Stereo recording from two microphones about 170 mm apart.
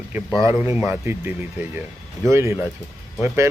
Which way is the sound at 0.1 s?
15° right (ahead or behind).